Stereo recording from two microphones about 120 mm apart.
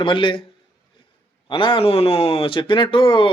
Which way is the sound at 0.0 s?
45° left (ahead or behind).